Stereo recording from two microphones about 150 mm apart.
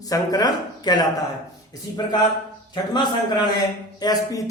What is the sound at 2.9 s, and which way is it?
A man's voice, 30° left (ahead or behind).